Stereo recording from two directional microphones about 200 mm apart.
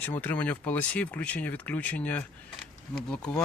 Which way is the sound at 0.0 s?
10° left (ahead or behind).